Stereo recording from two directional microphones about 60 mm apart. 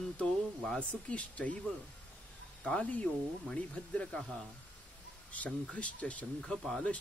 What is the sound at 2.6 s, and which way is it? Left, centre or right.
Speech, left.